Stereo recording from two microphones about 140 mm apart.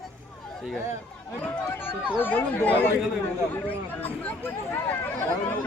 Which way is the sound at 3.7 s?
10° left (ahead or behind).